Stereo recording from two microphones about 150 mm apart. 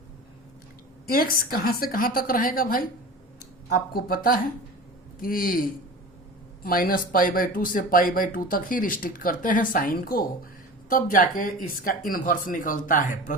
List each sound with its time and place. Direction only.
1.0 s speech: 75° left (ahead or behind)